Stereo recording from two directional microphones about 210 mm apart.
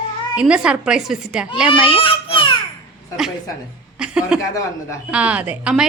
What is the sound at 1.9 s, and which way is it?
Speech, 25° left (ahead or behind).